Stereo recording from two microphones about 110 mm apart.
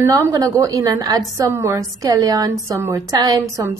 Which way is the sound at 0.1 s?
30° right (ahead or behind).